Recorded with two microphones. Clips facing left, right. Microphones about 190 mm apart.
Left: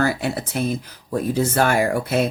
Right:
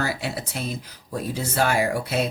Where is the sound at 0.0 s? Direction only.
50° left (ahead or behind).